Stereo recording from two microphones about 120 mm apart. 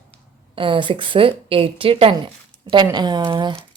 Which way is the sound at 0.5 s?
45° right (ahead or behind).